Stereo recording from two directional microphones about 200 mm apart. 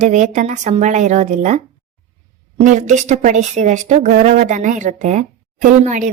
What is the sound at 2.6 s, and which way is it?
A woman's voice, 35° right (ahead or behind).